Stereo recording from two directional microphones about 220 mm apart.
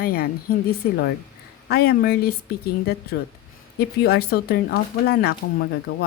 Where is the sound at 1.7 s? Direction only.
45° left (ahead or behind).